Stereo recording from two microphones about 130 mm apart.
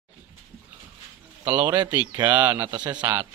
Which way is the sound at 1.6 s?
15° right (ahead or behind).